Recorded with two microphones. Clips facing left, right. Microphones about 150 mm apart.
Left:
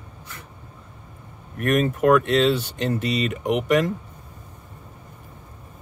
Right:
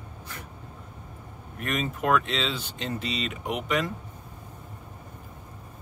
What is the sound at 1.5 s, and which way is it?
Speech, 55° left (ahead or behind).